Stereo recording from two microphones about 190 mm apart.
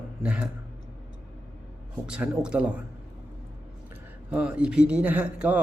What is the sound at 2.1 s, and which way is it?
Speech, 5° right (ahead or behind).